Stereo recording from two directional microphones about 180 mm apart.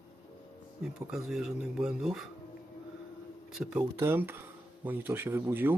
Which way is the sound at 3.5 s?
5° right (ahead or behind).